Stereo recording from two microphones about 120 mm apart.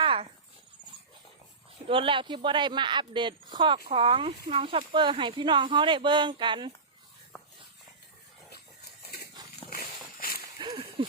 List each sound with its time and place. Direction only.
0.0 s dog: 50° right (ahead or behind)
1.9 s a woman's voice: 45° right (ahead or behind)
9.6 s dog: 60° right (ahead or behind)
10.6 s a sound: 45° right (ahead or behind)